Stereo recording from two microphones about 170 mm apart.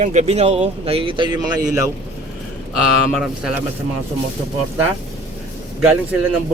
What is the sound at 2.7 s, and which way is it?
Speech, centre (ahead or behind).